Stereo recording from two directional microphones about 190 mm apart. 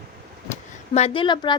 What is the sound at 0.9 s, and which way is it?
Speech, 30° left (ahead or behind).